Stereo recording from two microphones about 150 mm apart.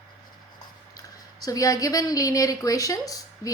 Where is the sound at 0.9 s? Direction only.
25° left (ahead or behind).